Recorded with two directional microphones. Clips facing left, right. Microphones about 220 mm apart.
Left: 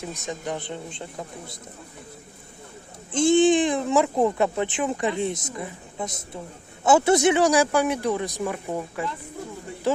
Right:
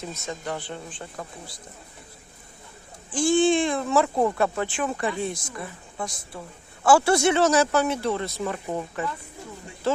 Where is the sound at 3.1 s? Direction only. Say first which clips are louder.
Left 3 dB; 20° left (ahead or behind).